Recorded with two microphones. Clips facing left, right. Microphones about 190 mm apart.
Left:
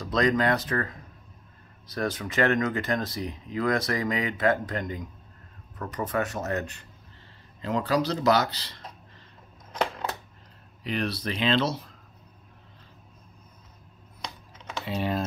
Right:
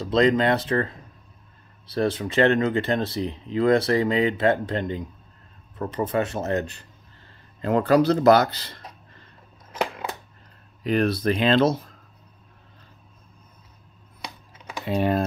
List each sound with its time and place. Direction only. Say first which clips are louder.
0.0 s speech: right 4 dB; 25° right (ahead or behind)
7.6 s speech: right 7 dB; 55° right (ahead or behind)
9.7 s a sound: right 1 dB; 10° right (ahead or behind)
10.8 s speech: right 8 dB; 45° right (ahead or behind)
14.2 s typing: right 1 dB; 10° right (ahead or behind)
14.9 s speech: right 7 dB; 55° right (ahead or behind)